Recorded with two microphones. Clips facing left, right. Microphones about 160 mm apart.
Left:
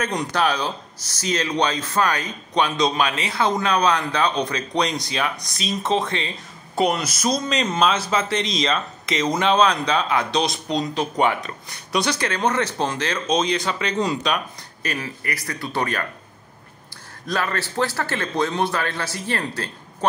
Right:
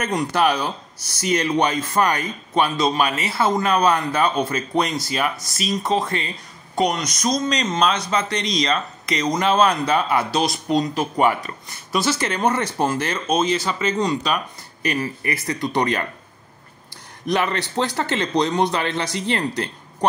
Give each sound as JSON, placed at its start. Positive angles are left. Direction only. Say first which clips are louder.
{"t": 0.0, "sound": "speech", "louder": "right 2 dB", "side_deg": -5}
{"t": 14.8, "sound": "speech", "louder": "right 5 dB", "side_deg": -10}
{"t": 15.2, "sound": "a man's voice", "louder": "right 5 dB", "side_deg": -25}
{"t": 17.3, "sound": "a man's voice", "louder": "right 3 dB", "side_deg": -20}